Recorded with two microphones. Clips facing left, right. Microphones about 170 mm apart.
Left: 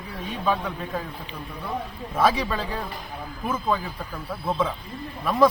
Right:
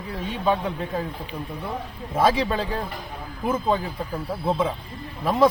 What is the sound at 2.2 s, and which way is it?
Speech, 25° right (ahead or behind).